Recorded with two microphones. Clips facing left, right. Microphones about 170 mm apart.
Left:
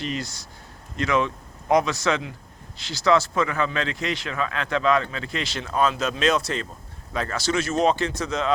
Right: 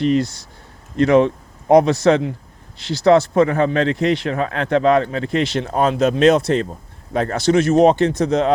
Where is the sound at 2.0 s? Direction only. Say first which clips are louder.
Right 10 dB; 30° right (ahead or behind).